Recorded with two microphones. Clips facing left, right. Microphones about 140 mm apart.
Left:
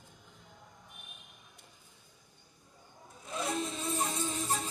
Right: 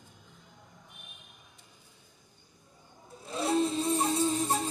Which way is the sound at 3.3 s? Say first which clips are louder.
Right 7 dB; 35° right (ahead or behind).